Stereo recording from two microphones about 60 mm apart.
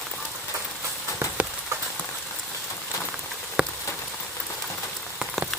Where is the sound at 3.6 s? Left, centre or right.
Centre.